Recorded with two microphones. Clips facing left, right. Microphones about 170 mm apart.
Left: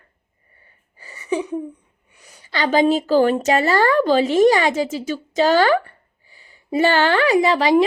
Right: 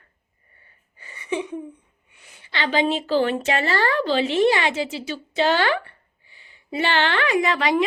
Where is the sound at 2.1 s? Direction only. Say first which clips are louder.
Left 4 dB; 40° left (ahead or behind).